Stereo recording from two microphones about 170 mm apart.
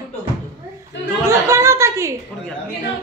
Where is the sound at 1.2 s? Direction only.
15° right (ahead or behind).